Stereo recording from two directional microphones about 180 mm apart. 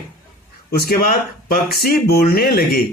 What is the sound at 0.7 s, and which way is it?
Speech, 55° left (ahead or behind).